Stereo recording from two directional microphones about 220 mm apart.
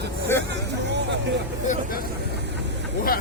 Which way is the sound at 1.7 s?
40° left (ahead or behind).